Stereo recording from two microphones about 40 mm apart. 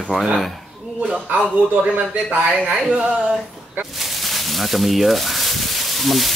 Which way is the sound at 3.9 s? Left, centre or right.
Centre.